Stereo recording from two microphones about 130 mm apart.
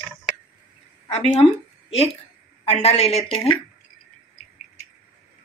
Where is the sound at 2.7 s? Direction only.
55° left (ahead or behind).